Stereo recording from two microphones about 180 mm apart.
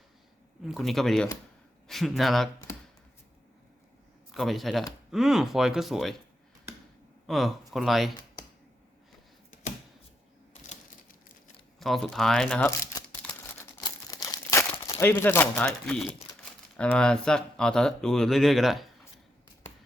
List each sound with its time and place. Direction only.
0.6 s speech: centre (ahead or behind)
4.3 s speech: centre (ahead or behind)
7.3 s speech: centre (ahead or behind)
11.8 s speech: centre (ahead or behind)
13.2 s crumpling: 15° left (ahead or behind)
14.9 s speech: 10° left (ahead or behind)